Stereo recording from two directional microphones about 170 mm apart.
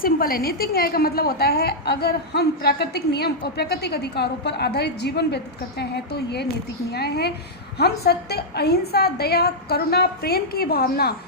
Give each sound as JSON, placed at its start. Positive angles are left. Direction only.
{"t": 0.0, "sound": "a woman's voice", "side_deg": 60}